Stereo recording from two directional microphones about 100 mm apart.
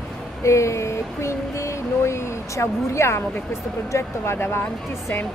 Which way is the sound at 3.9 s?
25° left (ahead or behind).